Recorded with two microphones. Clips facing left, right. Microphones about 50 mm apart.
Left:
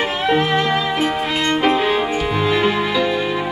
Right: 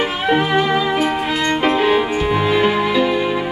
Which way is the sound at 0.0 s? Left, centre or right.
Centre.